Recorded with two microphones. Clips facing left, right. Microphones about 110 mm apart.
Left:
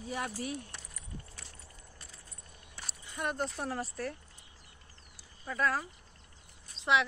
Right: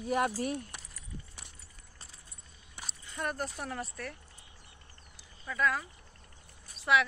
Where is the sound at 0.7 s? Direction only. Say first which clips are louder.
Right 1 dB; 15° right (ahead or behind).